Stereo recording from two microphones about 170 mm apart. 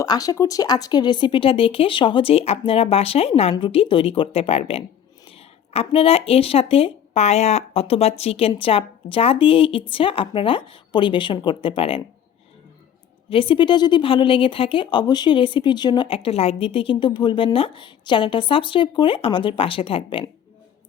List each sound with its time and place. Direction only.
0.0 s speech: 20° left (ahead or behind)
13.3 s speech: 30° left (ahead or behind)